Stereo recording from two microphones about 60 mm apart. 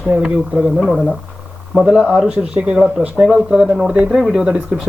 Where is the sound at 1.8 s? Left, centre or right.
Centre.